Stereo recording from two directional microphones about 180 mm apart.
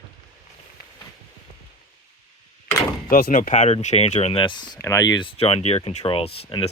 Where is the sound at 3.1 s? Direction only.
50° left (ahead or behind).